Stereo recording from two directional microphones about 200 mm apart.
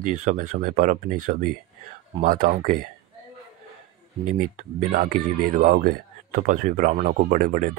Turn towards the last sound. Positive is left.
turn(degrees=-40)  # may be behind; listen again after turning